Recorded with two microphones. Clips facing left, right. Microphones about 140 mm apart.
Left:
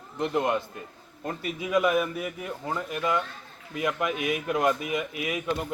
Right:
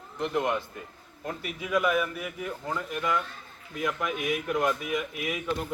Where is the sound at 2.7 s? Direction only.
20° left (ahead or behind).